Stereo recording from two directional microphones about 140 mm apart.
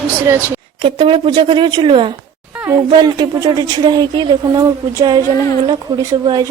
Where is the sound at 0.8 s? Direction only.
40° right (ahead or behind).